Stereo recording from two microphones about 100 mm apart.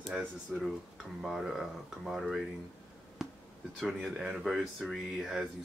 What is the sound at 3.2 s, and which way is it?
Basketball bounce, centre (ahead or behind).